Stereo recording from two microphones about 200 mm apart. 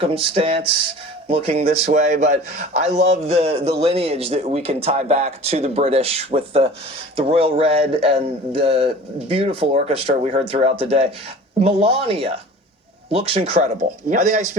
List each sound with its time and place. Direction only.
0.0 s a man's voice: 30° right (ahead or behind)